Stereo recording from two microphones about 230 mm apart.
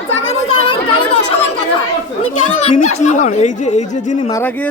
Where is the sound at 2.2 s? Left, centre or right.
Left.